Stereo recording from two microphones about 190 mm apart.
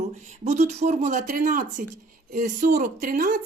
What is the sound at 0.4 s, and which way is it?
Speech, 35° right (ahead or behind).